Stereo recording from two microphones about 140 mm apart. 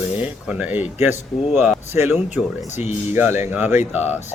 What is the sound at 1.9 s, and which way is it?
Speech, 15° right (ahead or behind).